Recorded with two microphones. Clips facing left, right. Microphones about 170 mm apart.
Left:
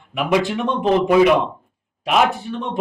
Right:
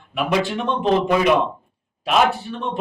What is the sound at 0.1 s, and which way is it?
Speech, 15° left (ahead or behind).